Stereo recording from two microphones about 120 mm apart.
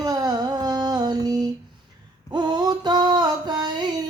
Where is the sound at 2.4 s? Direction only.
35° right (ahead or behind).